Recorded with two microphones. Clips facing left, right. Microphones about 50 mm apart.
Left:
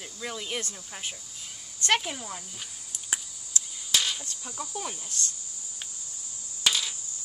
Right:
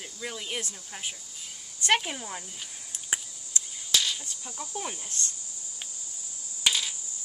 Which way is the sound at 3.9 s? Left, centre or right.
Centre.